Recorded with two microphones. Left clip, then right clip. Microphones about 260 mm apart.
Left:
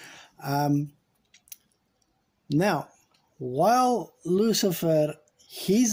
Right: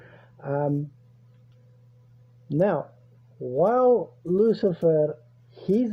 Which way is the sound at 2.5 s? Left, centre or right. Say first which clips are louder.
Right 2 dB; left.